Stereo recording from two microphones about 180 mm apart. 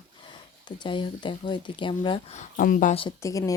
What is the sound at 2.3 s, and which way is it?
Speech, 50° left (ahead or behind).